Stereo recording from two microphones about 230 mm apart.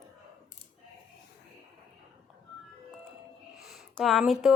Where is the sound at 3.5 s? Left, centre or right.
Centre.